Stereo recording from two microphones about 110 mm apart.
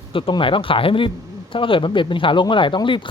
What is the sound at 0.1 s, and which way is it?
A man's voice, 50° left (ahead or behind).